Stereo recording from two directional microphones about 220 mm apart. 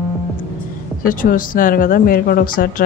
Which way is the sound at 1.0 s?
40° left (ahead or behind).